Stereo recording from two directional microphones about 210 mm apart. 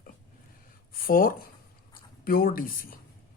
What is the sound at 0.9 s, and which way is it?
Speech, 45° left (ahead or behind).